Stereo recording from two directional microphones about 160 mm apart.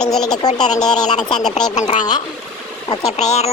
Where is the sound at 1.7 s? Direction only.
45° left (ahead or behind).